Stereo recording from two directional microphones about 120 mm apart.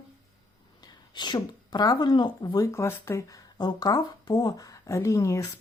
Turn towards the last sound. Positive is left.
turn(degrees=25)  # may be behind; listen again after turning